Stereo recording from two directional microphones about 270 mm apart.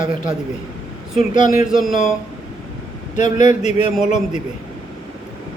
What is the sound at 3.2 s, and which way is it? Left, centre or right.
Speech, left.